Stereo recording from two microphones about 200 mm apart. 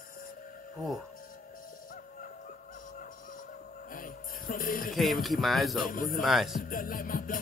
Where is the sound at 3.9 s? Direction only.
45° left (ahead or behind).